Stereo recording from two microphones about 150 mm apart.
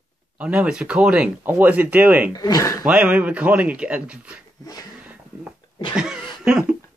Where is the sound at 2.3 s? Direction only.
25° left (ahead or behind).